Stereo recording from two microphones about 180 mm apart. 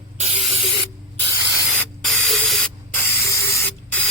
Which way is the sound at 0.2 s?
35° right (ahead or behind).